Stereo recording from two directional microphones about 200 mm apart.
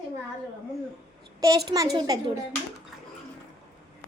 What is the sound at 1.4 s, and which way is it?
Speech, 20° right (ahead or behind).